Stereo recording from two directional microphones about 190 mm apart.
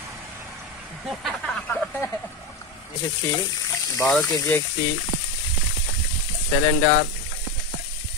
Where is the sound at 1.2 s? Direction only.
5° left (ahead or behind).